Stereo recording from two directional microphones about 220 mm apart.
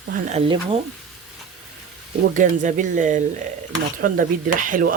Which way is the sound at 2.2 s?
35° right (ahead or behind).